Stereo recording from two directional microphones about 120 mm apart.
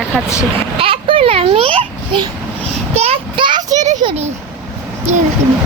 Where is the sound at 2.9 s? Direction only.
55° right (ahead or behind).